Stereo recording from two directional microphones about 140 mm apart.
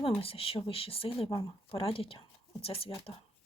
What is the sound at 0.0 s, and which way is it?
Speech, 40° left (ahead or behind).